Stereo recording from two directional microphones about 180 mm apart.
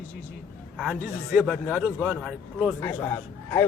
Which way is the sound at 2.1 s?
5° right (ahead or behind).